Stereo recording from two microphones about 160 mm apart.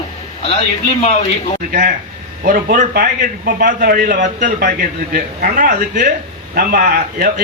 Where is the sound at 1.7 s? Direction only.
60° right (ahead or behind).